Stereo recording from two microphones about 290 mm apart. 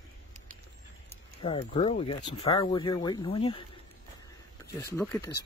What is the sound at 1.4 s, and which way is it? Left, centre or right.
Speech, centre.